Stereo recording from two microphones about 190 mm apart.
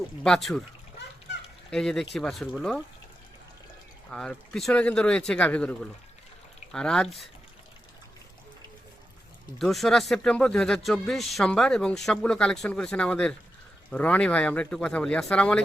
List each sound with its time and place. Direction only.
0.2 s speech: centre (ahead or behind)
1.7 s speech: 5° left (ahead or behind)
4.1 s speech: 5° left (ahead or behind)
9.6 s speech: centre (ahead or behind)